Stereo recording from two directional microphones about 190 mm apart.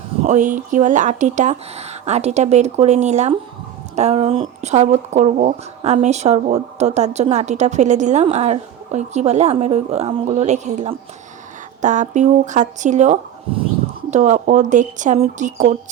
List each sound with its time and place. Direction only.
0.3 s speech: 40° right (ahead or behind)